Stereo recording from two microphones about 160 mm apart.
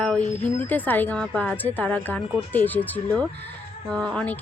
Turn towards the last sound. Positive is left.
turn(degrees=10)  # may be behind; listen again after turning